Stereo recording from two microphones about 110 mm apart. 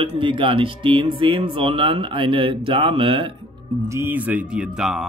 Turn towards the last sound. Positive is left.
turn(degrees=-5)  # may be behind; listen again after turning